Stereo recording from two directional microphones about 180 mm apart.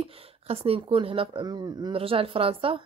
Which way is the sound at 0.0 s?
30° right (ahead or behind).